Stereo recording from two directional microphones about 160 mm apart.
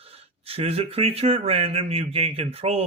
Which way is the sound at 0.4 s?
40° right (ahead or behind).